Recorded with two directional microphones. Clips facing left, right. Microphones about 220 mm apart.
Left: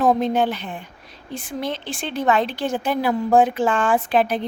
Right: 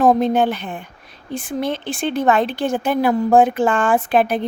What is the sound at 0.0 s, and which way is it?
A woman's voice, 50° right (ahead or behind).